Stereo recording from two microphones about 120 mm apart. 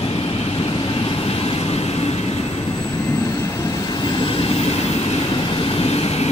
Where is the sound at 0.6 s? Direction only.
50° left (ahead or behind).